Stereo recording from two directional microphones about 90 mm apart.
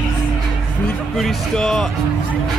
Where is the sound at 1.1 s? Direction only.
Centre (ahead or behind).